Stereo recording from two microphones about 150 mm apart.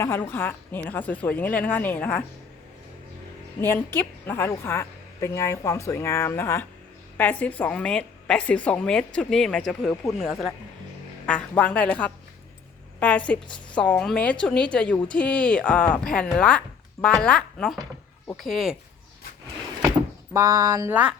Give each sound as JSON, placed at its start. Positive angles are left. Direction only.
{"t": 0.0, "sound": "a woman's voice", "side_deg": 15}
{"t": 3.6, "sound": "a woman's voice", "side_deg": 15}
{"t": 20.3, "sound": "speech", "side_deg": -20}